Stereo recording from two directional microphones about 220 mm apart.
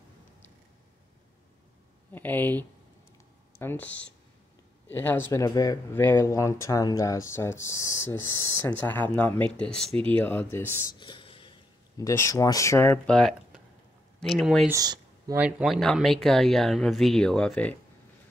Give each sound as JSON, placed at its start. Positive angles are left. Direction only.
{"t": 2.1, "sound": "speech", "side_deg": 10}
{"t": 5.3, "sound": "speech", "side_deg": 15}
{"t": 11.0, "sound": "whispering", "side_deg": 20}
{"t": 12.0, "sound": "speech", "side_deg": 15}
{"t": 14.7, "sound": "speech", "side_deg": -15}
{"t": 15.4, "sound": "speech", "side_deg": 0}